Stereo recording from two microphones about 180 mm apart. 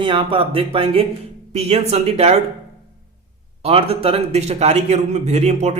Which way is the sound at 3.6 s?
35° right (ahead or behind).